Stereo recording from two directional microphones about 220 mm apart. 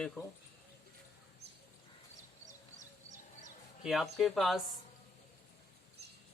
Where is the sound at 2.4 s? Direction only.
35° right (ahead or behind).